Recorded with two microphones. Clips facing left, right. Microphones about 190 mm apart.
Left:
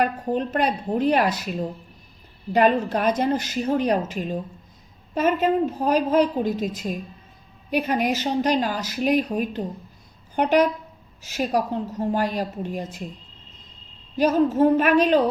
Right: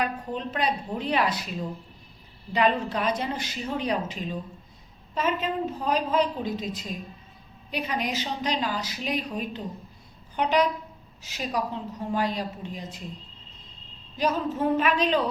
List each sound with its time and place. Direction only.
0.0 s a woman's voice: 50° left (ahead or behind)
14.2 s a woman's voice: 45° left (ahead or behind)